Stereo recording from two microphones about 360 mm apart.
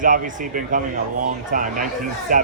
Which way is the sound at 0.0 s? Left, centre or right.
Right.